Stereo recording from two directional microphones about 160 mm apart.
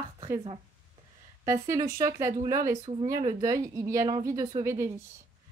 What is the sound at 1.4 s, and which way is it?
Speech, 20° right (ahead or behind).